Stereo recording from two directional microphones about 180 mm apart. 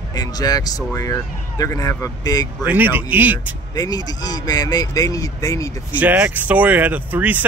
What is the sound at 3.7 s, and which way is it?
Speech, 20° left (ahead or behind).